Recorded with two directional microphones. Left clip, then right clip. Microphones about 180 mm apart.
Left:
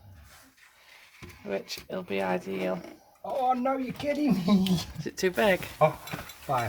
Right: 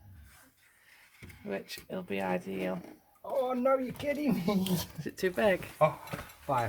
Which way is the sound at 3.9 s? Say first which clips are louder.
Left 4 dB; 25° right (ahead or behind).